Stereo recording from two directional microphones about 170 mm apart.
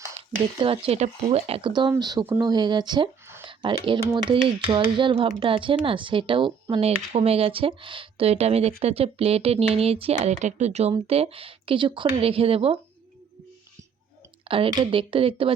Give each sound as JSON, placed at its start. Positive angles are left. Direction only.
{"t": 0.6, "sound": "speech", "side_deg": -30}
{"t": 14.4, "sound": "speech", "side_deg": -30}